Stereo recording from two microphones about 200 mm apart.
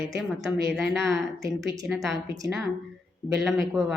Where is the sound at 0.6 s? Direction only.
Centre (ahead or behind).